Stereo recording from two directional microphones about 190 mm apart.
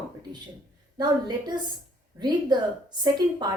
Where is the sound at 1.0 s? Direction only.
20° right (ahead or behind).